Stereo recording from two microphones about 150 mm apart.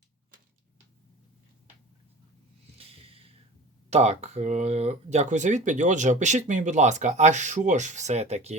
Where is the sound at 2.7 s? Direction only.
40° right (ahead or behind).